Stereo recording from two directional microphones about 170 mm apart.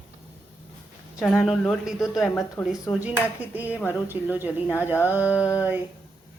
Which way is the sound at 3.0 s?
10° right (ahead or behind).